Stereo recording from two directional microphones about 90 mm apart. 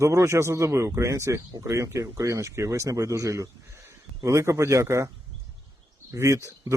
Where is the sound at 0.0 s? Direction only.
35° right (ahead or behind).